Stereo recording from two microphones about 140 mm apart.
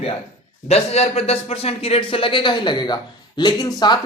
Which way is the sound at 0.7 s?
50° left (ahead or behind).